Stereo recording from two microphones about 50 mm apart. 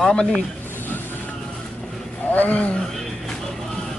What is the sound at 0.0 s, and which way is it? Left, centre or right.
Speech, centre.